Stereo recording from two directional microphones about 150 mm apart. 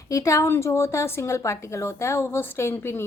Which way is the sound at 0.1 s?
20° left (ahead or behind).